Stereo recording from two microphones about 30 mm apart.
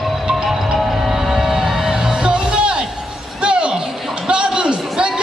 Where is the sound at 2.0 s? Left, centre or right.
Right.